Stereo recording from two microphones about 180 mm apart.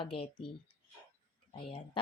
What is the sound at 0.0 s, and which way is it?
Speech, 30° left (ahead or behind).